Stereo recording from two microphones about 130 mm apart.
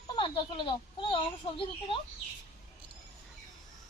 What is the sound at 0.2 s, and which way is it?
A child's voice, 40° left (ahead or behind).